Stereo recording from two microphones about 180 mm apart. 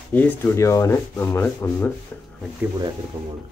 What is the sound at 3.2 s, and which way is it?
Speech, 10° right (ahead or behind).